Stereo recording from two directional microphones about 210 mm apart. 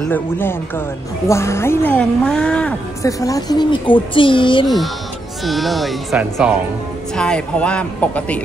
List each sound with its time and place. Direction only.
0.0 s a woman's voice: 10° left (ahead or behind)
3.1 s speech: 15° left (ahead or behind)
5.4 s speech: centre (ahead or behind)